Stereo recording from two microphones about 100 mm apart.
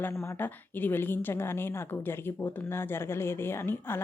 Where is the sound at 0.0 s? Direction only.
30° left (ahead or behind).